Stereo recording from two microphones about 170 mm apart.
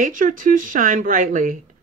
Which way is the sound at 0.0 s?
50° right (ahead or behind).